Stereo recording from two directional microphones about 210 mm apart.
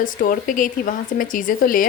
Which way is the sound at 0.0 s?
40° left (ahead or behind).